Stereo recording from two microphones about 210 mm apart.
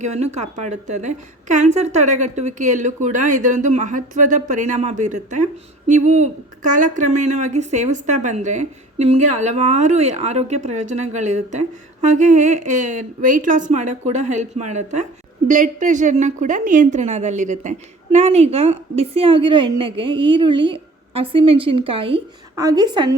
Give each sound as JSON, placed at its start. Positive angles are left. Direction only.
{"t": 0.0, "sound": "a woman's voice", "side_deg": -35}